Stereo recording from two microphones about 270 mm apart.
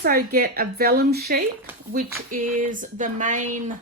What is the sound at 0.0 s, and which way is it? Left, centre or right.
Speech, right.